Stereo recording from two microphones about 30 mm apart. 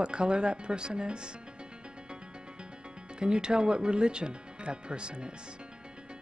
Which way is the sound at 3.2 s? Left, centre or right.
Right.